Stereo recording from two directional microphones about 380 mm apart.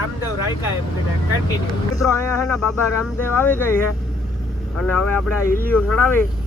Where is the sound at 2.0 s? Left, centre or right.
Centre.